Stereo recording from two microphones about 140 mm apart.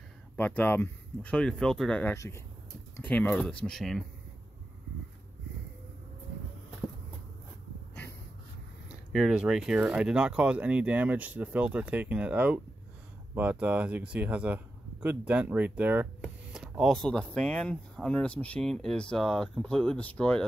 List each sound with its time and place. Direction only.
0.4 s speech: 10° left (ahead or behind)
2.1 s speech: 20° left (ahead or behind); by 4.0 s centre (ahead or behind)
9.1 s speech: 5° right (ahead or behind)